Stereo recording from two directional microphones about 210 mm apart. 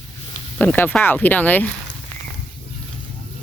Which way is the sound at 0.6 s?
10° left (ahead or behind).